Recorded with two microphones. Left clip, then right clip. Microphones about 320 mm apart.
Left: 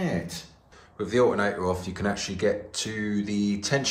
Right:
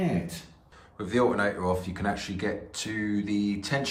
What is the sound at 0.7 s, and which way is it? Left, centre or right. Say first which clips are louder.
Speech: left 3 dB; centre.